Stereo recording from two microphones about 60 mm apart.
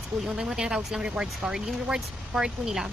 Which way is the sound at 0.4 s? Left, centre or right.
Centre.